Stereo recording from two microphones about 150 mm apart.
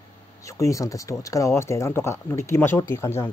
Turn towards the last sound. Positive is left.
turn(degrees=20)  # may be behind; listen again after turning